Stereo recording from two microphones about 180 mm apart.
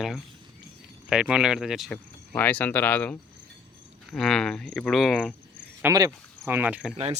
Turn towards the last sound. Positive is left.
turn(degrees=-5)  # may be behind; listen again after turning